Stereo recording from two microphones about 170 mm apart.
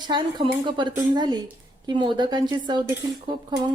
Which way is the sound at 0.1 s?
25° right (ahead or behind).